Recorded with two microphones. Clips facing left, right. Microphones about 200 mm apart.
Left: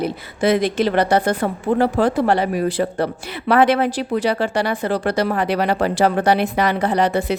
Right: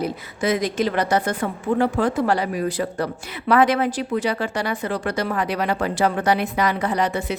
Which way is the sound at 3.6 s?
65° left (ahead or behind).